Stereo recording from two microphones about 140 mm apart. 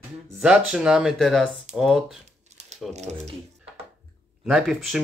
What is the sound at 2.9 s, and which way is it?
Speech, 55° right (ahead or behind).